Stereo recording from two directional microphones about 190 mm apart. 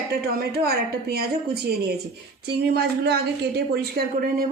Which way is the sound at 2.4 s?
55° right (ahead or behind).